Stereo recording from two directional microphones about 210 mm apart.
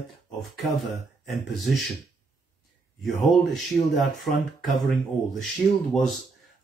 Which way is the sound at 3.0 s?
Centre (ahead or behind).